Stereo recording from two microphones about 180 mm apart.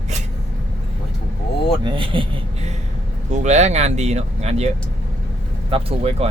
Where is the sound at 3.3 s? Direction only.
40° right (ahead or behind).